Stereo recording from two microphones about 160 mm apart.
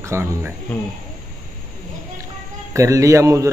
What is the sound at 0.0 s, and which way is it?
Speech, 15° right (ahead or behind).